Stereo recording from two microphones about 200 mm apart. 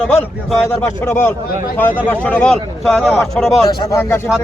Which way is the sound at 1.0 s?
10° left (ahead or behind).